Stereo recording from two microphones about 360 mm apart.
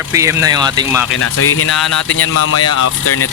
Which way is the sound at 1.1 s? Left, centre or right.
Left.